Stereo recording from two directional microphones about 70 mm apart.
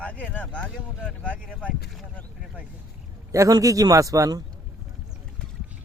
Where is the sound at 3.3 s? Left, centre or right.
Right.